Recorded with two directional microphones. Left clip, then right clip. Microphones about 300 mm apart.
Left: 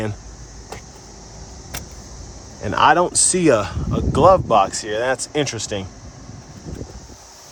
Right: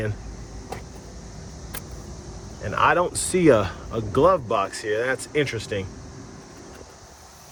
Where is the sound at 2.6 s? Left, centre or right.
Centre.